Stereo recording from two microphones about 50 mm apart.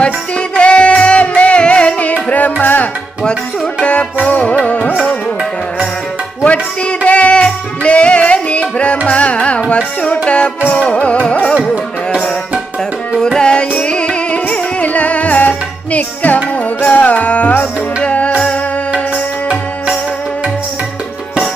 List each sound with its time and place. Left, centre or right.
0.0 s music: left
3.8 s music: left
6.4 s music: left
13.1 s carnatic music: centre; by 16.4 s left
16.8 s music: left